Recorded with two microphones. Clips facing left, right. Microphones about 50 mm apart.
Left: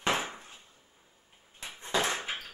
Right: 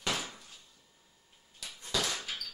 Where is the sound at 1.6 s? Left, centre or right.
Left.